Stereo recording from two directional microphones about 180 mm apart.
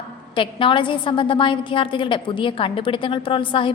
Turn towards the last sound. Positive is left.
turn(degrees=30)  # may be behind; listen again after turning